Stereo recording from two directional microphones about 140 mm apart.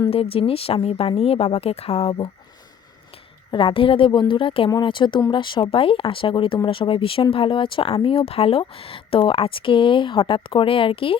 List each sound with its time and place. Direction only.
0.1 s speech: 45° left (ahead or behind)
3.5 s speech: 40° left (ahead or behind)